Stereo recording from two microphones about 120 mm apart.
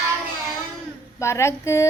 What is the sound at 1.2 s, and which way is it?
Mantra, 25° left (ahead or behind).